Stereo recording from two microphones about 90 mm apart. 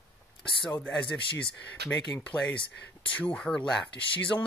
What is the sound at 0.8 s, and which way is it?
Speech, 5° left (ahead or behind).